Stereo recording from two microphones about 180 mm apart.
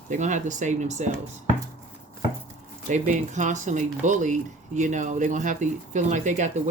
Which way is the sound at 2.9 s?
45° right (ahead or behind).